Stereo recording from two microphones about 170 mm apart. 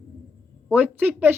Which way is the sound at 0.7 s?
10° right (ahead or behind).